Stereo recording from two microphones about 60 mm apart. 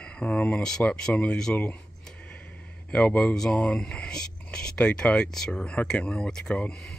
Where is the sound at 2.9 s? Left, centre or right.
Centre.